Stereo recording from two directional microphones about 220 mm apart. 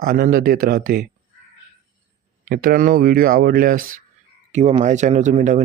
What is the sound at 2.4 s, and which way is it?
Speech, 40° right (ahead or behind).